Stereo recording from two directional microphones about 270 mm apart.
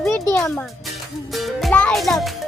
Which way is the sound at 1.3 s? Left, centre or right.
Centre.